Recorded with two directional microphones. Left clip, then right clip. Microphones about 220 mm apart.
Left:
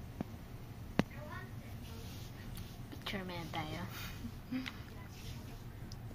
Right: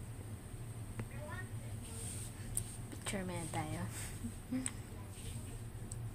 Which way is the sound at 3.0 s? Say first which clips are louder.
Even; 5° right (ahead or behind).